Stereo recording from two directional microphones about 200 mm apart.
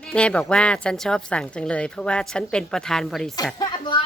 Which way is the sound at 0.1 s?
5° left (ahead or behind).